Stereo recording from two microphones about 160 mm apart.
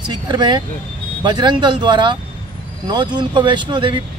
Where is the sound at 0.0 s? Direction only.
30° right (ahead or behind).